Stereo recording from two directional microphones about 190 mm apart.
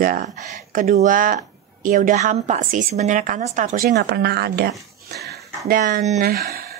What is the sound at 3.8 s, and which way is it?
Speech, 60° right (ahead or behind).